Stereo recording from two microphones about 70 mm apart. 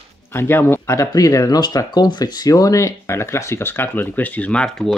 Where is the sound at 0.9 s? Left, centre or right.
Left.